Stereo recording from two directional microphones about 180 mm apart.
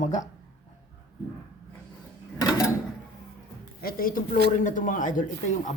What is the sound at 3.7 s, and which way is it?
Speech, 55° left (ahead or behind).